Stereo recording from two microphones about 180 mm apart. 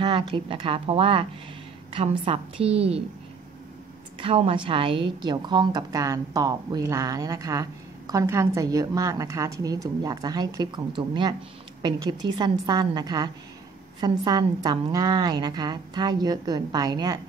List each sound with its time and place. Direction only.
0.0 s a woman's voice: 30° right (ahead or behind)
4.2 s a woman's voice: 30° right (ahead or behind)